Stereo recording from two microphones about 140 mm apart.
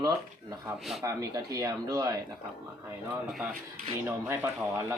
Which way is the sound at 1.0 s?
20° right (ahead or behind).